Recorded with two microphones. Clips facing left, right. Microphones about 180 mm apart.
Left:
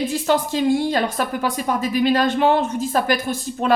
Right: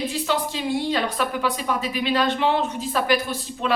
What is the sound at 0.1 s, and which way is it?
A woman's voice, 45° left (ahead or behind).